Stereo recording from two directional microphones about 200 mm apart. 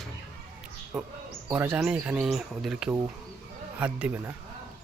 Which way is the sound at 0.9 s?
5° right (ahead or behind).